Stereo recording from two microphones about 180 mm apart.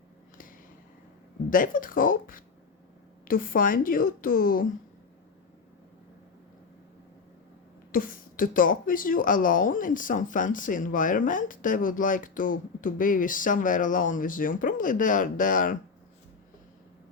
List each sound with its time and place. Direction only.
1.5 s speech: 50° left (ahead or behind)
7.9 s speech: 50° left (ahead or behind)